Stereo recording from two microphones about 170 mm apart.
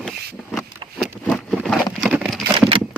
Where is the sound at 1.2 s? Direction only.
5° left (ahead or behind).